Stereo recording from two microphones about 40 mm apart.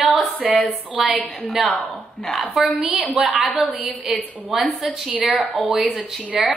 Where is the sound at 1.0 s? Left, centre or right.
Centre.